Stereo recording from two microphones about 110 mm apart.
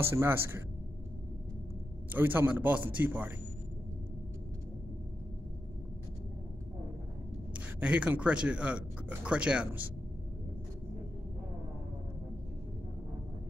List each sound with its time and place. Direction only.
0.0 s speech: 20° right (ahead or behind)
2.1 s speech: 15° right (ahead or behind)
7.5 s speech: 10° right (ahead or behind)